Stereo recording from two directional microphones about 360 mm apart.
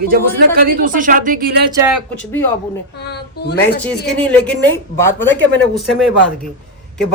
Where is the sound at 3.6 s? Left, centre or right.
Centre.